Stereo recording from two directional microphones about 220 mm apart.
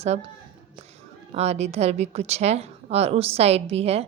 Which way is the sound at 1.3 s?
30° right (ahead or behind).